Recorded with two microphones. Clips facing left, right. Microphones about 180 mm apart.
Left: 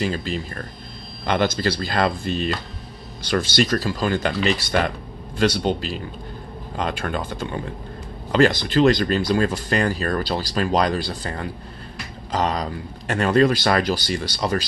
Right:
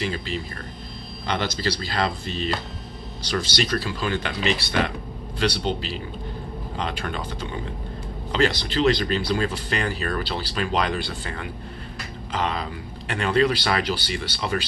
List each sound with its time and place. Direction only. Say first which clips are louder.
0.0 s speech: left 3 dB; 45° left (ahead or behind)